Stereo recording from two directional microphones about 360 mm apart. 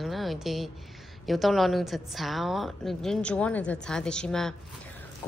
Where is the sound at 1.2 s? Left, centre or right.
Centre.